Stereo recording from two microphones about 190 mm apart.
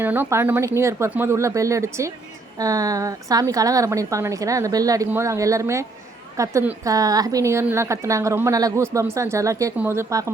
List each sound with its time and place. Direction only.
0.0 s a woman's voice: 10° right (ahead or behind)